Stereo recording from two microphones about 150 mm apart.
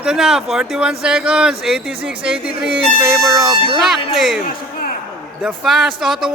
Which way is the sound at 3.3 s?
25° right (ahead or behind).